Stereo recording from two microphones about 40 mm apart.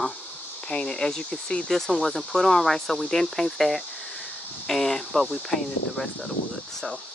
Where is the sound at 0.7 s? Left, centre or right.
Left.